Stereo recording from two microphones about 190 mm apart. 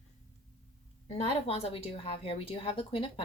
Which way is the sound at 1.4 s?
30° left (ahead or behind).